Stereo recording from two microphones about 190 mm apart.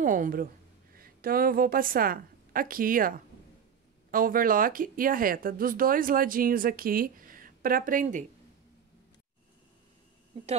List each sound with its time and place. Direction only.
0.0 s a woman's voice: 45° right (ahead or behind)